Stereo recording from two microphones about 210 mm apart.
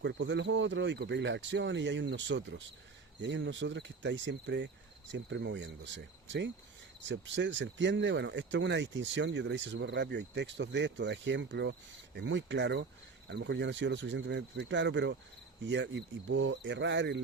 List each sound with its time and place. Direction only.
0.0 s speech: 60° right (ahead or behind)